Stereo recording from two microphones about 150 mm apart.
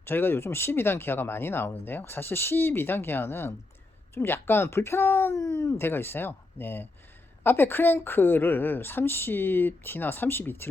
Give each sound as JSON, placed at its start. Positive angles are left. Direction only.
{"t": 0.0, "sound": "speech", "side_deg": 15}